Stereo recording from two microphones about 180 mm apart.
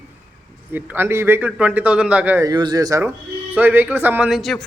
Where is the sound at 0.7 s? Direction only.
10° right (ahead or behind).